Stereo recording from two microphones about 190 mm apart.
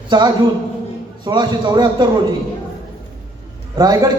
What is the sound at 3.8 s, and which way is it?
Speech, 20° right (ahead or behind).